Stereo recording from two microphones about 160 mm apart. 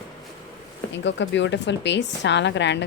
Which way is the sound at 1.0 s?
90° left.